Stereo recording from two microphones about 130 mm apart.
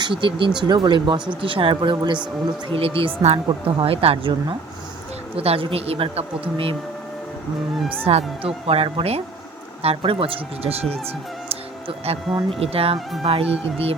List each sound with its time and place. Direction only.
0.0 s a woman's voice: 40° right (ahead or behind)
5.4 s a woman's voice: 50° right (ahead or behind)
8.0 s a woman's voice: 50° right (ahead or behind)